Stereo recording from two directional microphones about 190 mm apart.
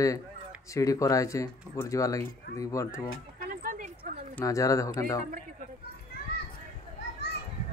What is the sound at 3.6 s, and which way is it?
Dog, 45° right (ahead or behind).